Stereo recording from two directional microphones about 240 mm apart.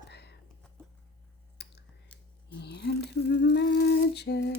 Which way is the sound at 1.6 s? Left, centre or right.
Left.